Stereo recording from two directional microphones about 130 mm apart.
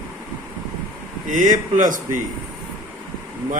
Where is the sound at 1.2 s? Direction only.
80° right.